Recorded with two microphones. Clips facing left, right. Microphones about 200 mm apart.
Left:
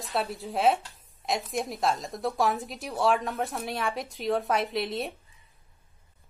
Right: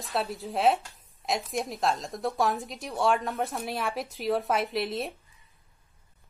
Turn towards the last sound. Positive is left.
turn(degrees=0)  # may be behind; listen again after turning